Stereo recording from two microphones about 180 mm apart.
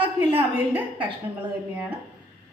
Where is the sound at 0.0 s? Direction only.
30° right (ahead or behind).